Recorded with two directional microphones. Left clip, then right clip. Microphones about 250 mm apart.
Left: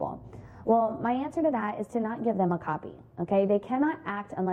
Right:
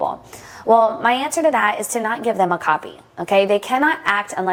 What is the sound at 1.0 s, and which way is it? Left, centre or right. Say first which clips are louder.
A woman's voice: right 11 dB; centre.